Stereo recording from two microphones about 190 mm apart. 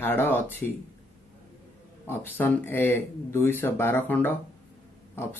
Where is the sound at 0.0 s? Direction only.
10° left (ahead or behind).